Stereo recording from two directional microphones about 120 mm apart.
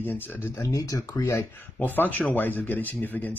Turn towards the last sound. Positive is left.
turn(degrees=15)  # may be behind; listen again after turning